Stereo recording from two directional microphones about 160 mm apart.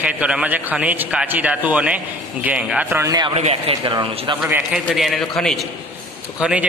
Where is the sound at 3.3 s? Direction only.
40° right (ahead or behind).